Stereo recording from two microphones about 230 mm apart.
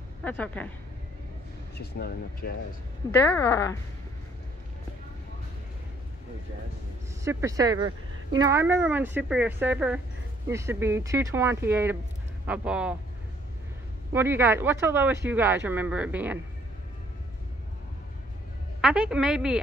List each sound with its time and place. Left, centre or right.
0.2 s speech: centre
1.8 s speech: left
3.1 s speech: centre
7.2 s a woman's voice: centre
14.1 s speech: centre
18.8 s a woman's voice: centre